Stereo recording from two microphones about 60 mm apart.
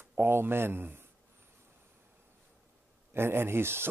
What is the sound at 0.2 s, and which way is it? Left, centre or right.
Speech, right.